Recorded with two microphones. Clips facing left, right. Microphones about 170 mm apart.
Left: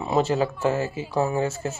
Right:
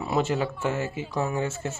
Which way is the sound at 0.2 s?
35° left (ahead or behind).